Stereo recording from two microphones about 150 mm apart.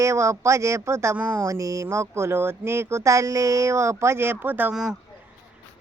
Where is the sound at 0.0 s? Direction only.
20° right (ahead or behind).